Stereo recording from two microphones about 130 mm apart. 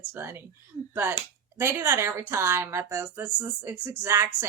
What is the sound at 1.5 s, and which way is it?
Speech, 20° right (ahead or behind).